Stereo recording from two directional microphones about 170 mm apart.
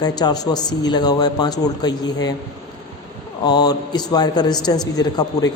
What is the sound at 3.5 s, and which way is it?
Speech, 25° left (ahead or behind).